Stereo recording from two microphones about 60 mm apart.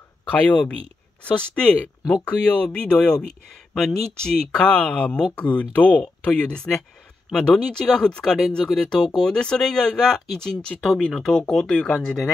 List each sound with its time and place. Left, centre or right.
0.3 s speech: left